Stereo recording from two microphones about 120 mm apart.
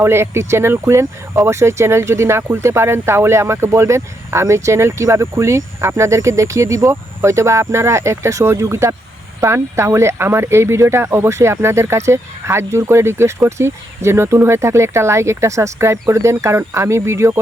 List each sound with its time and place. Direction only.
0.0 s speech: 20° right (ahead or behind)